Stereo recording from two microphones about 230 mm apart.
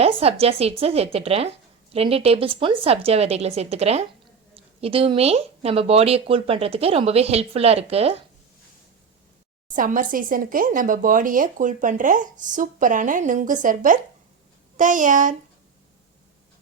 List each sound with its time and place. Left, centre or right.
0.0 s speech: right
9.6 s speech: right